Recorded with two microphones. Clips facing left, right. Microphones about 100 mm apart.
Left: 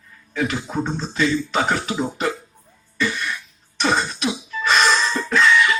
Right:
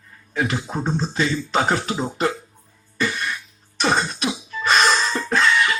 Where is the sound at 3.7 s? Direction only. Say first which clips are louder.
Even; 40° right (ahead or behind).